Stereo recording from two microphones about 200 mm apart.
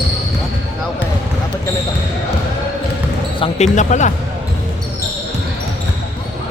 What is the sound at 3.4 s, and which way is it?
Speech, 25° left (ahead or behind).